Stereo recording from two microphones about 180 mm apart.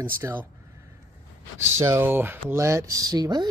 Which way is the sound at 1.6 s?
15° right (ahead or behind).